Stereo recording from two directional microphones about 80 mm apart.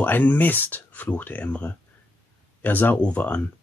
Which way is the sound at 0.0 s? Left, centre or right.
Left.